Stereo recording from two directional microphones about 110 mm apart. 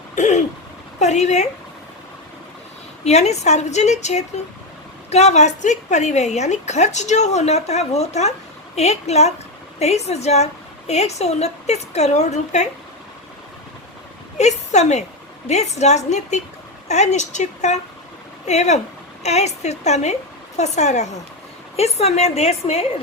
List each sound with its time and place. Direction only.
0.2 s a sound: 90° left
0.9 s a woman's voice: 90° left
3.0 s a woman's voice: 85° left
14.3 s a woman's voice: 90° left
21.8 s a woman's voice: 70° left (ahead or behind)